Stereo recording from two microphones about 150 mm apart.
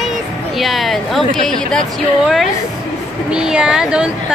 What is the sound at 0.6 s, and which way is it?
Speech, centre (ahead or behind).